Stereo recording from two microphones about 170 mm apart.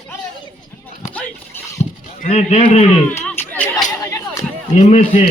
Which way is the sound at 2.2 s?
40° left (ahead or behind).